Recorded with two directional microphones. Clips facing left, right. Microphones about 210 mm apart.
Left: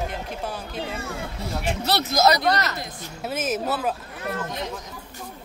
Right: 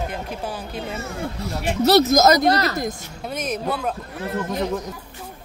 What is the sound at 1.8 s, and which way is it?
Speech, 45° right (ahead or behind).